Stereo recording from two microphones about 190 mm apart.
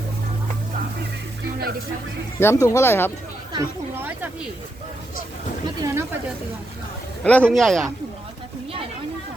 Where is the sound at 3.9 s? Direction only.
10° right (ahead or behind).